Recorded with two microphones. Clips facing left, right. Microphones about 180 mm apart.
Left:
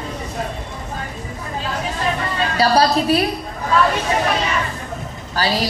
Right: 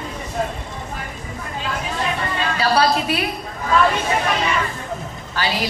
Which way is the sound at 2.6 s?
35° left (ahead or behind).